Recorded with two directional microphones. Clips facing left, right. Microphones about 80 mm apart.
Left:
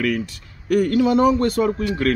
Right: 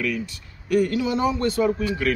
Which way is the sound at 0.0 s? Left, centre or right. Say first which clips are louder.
Left 4 dB; left.